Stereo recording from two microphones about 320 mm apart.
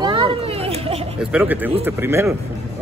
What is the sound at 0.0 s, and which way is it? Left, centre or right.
Children playing, centre.